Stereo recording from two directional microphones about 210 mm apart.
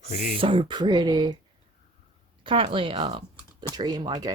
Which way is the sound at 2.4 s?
25° right (ahead or behind).